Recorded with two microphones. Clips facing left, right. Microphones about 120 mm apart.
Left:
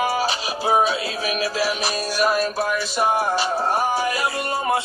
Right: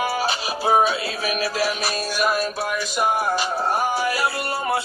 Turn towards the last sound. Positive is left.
turn(degrees=35)  # may be behind; listen again after turning